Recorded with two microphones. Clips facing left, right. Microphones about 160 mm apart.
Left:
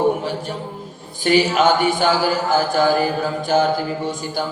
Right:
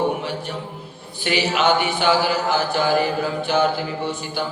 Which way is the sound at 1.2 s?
45° left (ahead or behind).